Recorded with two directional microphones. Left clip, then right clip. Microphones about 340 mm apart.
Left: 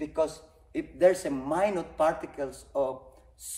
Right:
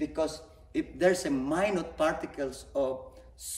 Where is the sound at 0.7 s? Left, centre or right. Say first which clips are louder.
Left 3 dB; centre.